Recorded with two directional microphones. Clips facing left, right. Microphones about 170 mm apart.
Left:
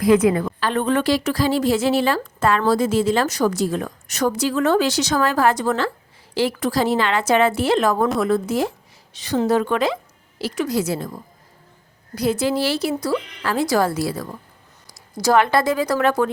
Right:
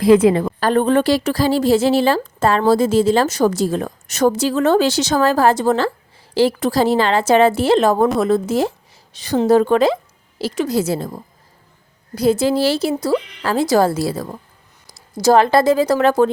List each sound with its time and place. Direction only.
0.0 s a woman's voice: 30° right (ahead or behind)